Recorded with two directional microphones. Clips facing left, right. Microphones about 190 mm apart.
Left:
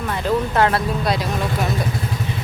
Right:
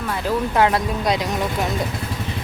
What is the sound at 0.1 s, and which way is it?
Speech, 10° right (ahead or behind).